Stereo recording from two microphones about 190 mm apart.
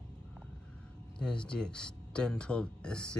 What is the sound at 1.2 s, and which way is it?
Speech, 5° left (ahead or behind).